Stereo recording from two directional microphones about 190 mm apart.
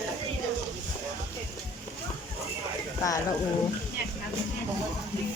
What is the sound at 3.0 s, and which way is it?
Speech, 20° left (ahead or behind).